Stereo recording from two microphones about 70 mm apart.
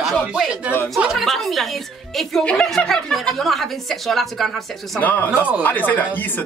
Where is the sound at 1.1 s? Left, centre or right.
Centre.